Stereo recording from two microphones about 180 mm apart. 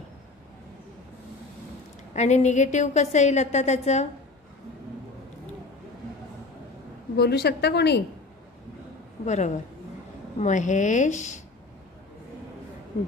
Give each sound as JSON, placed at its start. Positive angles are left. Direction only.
{"t": 2.1, "sound": "a woman's voice", "side_deg": 40}
{"t": 7.2, "sound": "a woman's voice", "side_deg": 65}
{"t": 9.2, "sound": "a woman's voice", "side_deg": 40}